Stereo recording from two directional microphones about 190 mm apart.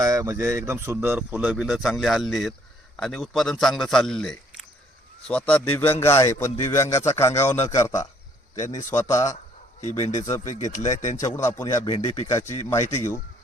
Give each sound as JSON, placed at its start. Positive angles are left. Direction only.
{"t": 0.0, "sound": "a man's voice", "side_deg": -15}
{"t": 8.5, "sound": "speech", "side_deg": 40}
{"t": 8.8, "sound": "a man's voice", "side_deg": 15}
{"t": 10.4, "sound": "speech", "side_deg": 40}
{"t": 11.2, "sound": "a man's voice", "side_deg": 15}